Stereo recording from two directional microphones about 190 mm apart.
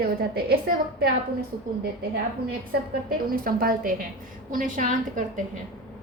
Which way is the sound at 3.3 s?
50° right (ahead or behind).